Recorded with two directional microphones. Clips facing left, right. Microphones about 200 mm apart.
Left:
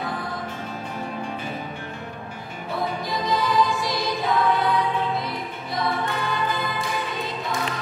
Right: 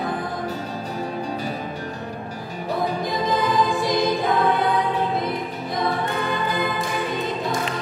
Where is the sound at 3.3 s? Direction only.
55° right (ahead or behind).